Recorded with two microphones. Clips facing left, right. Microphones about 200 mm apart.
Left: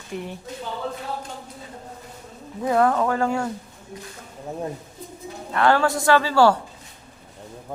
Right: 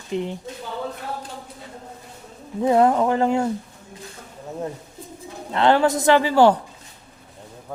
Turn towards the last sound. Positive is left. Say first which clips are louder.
# right 2 dB
turn(degrees=-15)  # may be behind; listen again after turning